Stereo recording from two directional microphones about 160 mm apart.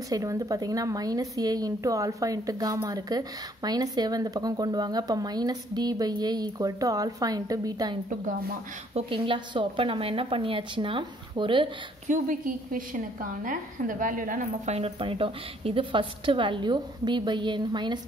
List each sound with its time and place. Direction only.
0.1 s a woman's voice: 20° right (ahead or behind)
8.9 s a woman's voice: 35° right (ahead or behind)
12.1 s a woman's voice: 60° right (ahead or behind)
14.8 s a woman's voice: 35° right (ahead or behind)